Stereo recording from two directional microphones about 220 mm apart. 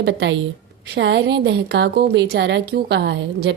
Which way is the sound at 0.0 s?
50° right (ahead or behind).